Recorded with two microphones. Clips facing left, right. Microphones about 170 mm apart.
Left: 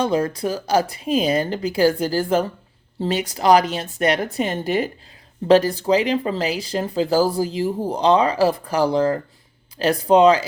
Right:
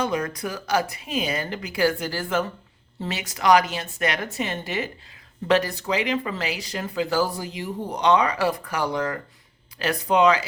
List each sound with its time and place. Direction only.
0.0 s speech: 30° left (ahead or behind)